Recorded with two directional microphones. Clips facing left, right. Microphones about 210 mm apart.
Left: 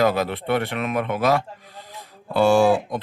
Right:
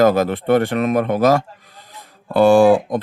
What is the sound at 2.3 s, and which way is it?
Speech, 50° right (ahead or behind).